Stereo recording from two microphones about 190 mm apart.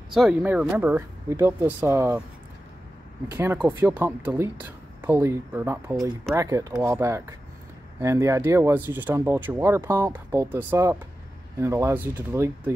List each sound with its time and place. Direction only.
0.1 s speech: centre (ahead or behind)
3.3 s speech: 10° right (ahead or behind)